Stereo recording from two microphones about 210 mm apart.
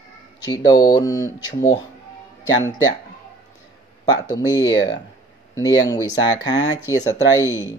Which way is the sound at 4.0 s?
20° left (ahead or behind).